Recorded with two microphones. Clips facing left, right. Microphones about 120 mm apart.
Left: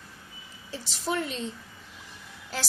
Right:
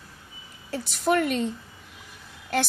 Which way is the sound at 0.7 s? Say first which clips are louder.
Right 7 dB; 65° right (ahead or behind).